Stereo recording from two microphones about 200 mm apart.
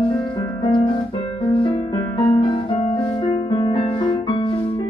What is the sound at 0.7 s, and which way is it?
Music, 25° left (ahead or behind).